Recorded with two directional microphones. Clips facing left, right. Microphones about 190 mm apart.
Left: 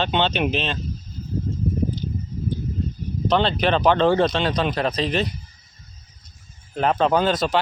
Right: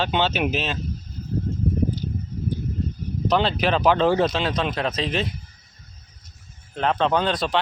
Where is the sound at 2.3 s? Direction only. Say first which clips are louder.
Left 1 dB; 60° right (ahead or behind).